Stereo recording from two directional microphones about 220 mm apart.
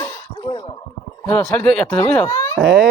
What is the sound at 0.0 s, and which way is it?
Gargling, 15° left (ahead or behind).